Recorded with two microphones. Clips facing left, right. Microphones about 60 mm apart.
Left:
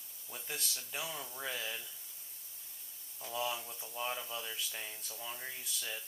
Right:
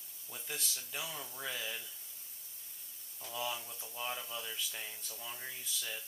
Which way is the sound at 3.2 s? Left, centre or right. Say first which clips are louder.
Left 2 dB; centre.